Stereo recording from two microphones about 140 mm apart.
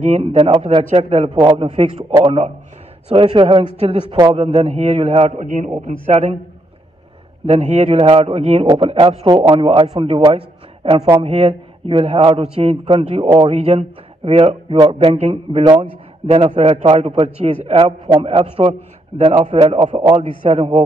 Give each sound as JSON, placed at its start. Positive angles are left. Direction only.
{"t": 0.0, "sound": "a man's voice", "side_deg": -50}
{"t": 1.0, "sound": "a man's voice", "side_deg": -55}
{"t": 1.3, "sound": "a man's voice", "side_deg": -40}
{"t": 4.4, "sound": "a man's voice", "side_deg": -50}
{"t": 5.4, "sound": "a man's voice", "side_deg": -70}
{"t": 5.9, "sound": "a man's voice", "side_deg": -55}
{"t": 7.4, "sound": "a man's voice", "side_deg": -50}
{"t": 8.6, "sound": "speech", "side_deg": -35}
{"t": 8.9, "sound": "a man's voice", "side_deg": -45}